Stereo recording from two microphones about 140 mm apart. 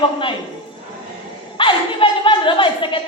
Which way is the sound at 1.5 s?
35° left (ahead or behind).